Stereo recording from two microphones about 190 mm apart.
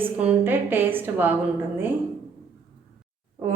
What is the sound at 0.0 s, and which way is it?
A woman's voice, 10° right (ahead or behind).